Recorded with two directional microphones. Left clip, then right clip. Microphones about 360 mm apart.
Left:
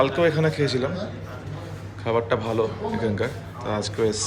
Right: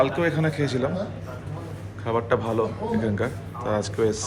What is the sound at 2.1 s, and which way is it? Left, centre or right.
A man's voice, centre.